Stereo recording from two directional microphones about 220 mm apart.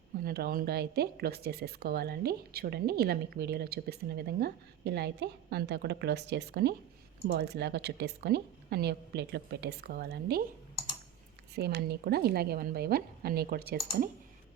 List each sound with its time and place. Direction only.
0.3 s speech: 40° right (ahead or behind)
11.5 s speech: 50° right (ahead or behind)